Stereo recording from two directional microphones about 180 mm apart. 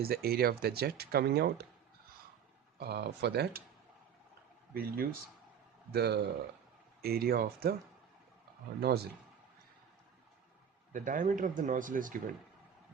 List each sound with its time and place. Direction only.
0.0 s speech: 60° right (ahead or behind)
2.7 s speech: 60° right (ahead or behind)
4.7 s speech: 55° right (ahead or behind)
8.8 s speech: 60° right (ahead or behind)
10.9 s speech: 45° right (ahead or behind)